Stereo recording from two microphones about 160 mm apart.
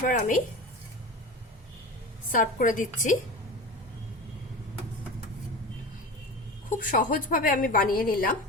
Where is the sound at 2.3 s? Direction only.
55° left (ahead or behind).